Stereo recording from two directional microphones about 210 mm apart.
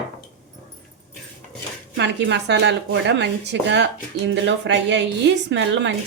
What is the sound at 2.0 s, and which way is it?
A woman's voice, 55° right (ahead or behind).